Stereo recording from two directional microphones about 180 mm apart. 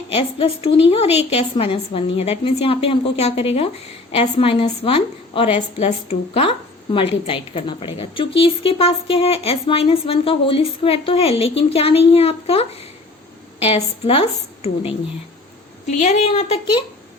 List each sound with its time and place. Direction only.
0.1 s speech: 35° left (ahead or behind)
16.0 s speech: 40° left (ahead or behind)